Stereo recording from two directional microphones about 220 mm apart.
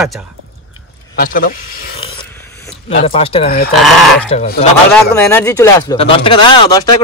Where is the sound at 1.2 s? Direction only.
40° left (ahead or behind).